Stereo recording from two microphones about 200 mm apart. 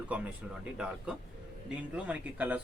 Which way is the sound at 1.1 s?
5° right (ahead or behind).